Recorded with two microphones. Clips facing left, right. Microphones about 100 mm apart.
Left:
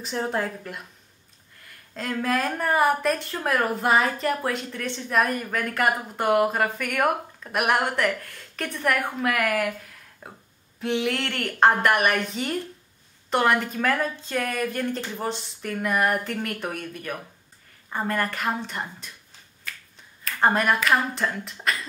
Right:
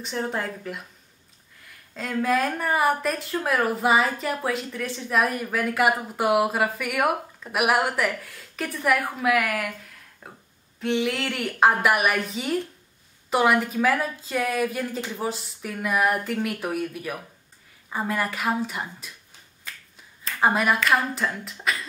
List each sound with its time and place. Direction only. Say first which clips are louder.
0.0 s a woman's voice: left 1 dB; centre (ahead or behind)
20.3 s a woman's voice: even; 5° right (ahead or behind)